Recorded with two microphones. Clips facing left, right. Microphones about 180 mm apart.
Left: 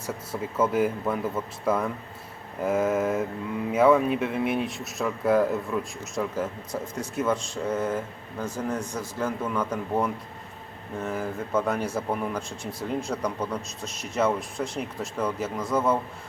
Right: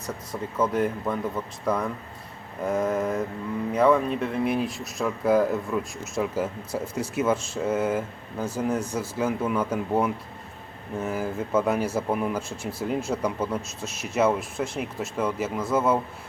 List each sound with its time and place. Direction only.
0.1 s speech: 5° left (ahead or behind)